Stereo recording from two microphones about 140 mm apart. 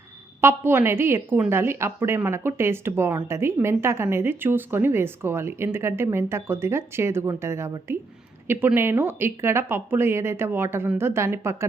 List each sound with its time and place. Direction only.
0.4 s speech: 15° right (ahead or behind)